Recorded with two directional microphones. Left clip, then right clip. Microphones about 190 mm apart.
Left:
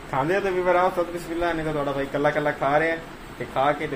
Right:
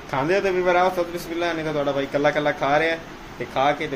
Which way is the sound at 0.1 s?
10° right (ahead or behind).